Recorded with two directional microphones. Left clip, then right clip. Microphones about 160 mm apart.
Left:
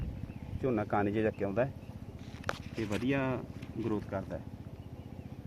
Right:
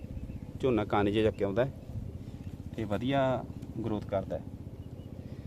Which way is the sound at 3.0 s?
35° right (ahead or behind).